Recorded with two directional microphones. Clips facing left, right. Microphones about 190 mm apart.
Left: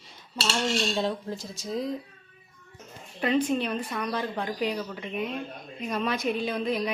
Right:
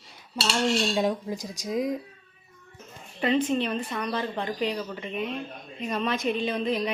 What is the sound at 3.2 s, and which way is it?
A woman's voice, 5° left (ahead or behind).